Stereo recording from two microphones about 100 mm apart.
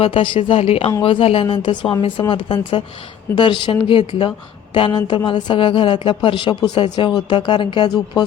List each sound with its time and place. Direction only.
0.0 s a woman's voice: 65° left (ahead or behind); by 0.9 s 80° left
1.0 s speech: 70° left (ahead or behind); by 8.2 s 55° left (ahead or behind)